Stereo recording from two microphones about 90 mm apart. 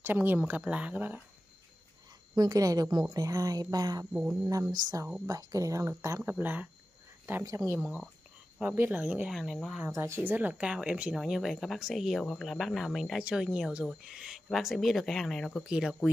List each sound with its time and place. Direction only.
0.0 s speech: 20° right (ahead or behind)
2.3 s speech: 45° right (ahead or behind)
4.1 s a woman's voice: 15° right (ahead or behind)
4.5 s speech: 40° right (ahead or behind)
6.3 s speech: 20° right (ahead or behind)
7.4 s speech: 35° right (ahead or behind)
8.7 s a woman's voice: 20° right (ahead or behind)
9.3 s speech: centre (ahead or behind)
9.8 s a woman's voice: 30° right (ahead or behind); by 13.2 s centre (ahead or behind)
13.2 s speech: 10° right (ahead or behind); by 15.6 s 5° left (ahead or behind)
15.6 s a woman's voice: 5° right (ahead or behind)